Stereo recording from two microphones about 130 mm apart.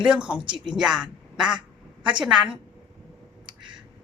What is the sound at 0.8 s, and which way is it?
A woman's voice, 5° right (ahead or behind).